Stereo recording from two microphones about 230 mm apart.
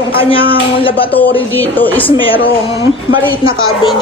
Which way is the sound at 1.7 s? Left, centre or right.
Centre.